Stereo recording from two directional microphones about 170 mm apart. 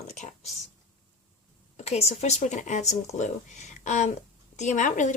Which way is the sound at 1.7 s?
40° left (ahead or behind).